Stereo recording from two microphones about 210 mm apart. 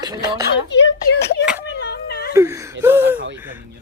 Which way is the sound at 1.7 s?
50° left (ahead or behind).